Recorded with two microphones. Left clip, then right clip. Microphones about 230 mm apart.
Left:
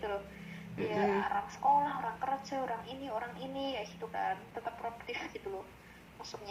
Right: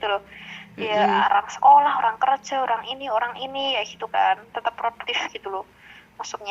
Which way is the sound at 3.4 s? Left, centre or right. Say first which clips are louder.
Right 13 dB; right.